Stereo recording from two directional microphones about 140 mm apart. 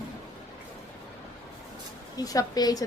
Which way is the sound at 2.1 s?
25° left (ahead or behind).